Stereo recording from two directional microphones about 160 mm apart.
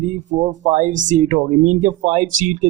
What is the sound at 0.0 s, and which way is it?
Speech, 50° right (ahead or behind).